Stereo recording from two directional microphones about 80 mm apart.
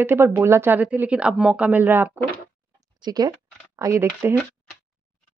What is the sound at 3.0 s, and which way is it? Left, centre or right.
Speech, right.